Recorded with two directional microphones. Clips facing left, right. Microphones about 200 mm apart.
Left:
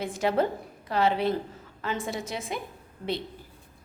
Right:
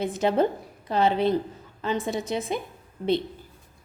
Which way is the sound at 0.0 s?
20° right (ahead or behind).